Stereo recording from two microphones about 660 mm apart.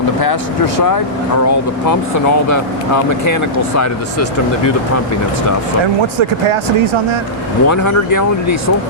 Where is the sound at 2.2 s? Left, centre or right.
Left.